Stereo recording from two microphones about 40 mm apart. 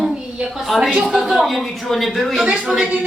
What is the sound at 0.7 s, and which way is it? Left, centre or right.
Speech, centre.